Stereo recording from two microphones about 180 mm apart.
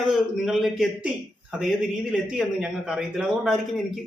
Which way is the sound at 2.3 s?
5° right (ahead or behind).